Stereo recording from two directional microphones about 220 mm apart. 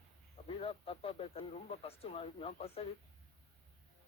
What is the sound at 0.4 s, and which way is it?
Speech, 25° left (ahead or behind).